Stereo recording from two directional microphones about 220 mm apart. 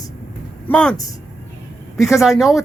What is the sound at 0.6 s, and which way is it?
Speech, 5° left (ahead or behind).